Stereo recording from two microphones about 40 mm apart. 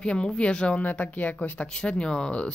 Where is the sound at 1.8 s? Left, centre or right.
Left.